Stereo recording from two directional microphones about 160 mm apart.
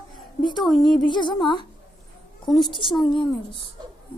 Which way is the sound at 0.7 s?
30° left (ahead or behind).